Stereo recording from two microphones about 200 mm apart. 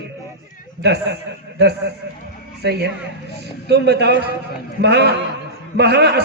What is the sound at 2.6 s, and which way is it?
A man's voice, 55° right (ahead or behind).